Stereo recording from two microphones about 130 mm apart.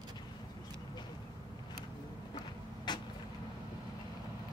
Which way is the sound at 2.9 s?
35° left (ahead or behind).